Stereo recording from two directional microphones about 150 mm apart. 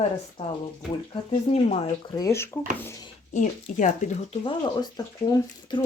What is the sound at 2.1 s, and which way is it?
Speech, 20° left (ahead or behind).